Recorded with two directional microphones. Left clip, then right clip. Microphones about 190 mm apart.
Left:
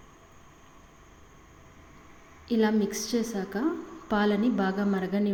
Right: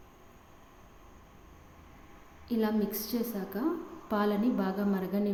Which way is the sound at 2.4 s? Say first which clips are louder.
Left 5 dB; 15° left (ahead or behind).